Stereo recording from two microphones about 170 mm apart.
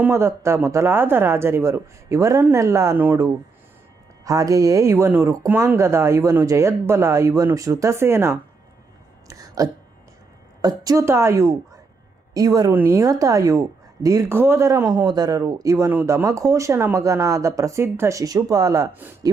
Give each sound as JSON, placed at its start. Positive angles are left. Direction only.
{"t": 0.0, "sound": "speech", "side_deg": -15}
{"t": 4.2, "sound": "speech", "side_deg": -20}
{"t": 9.2, "sound": "a sound", "side_deg": -20}
{"t": 10.6, "sound": "speech", "side_deg": -20}